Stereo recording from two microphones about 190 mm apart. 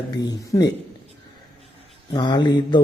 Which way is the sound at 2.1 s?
20° left (ahead or behind).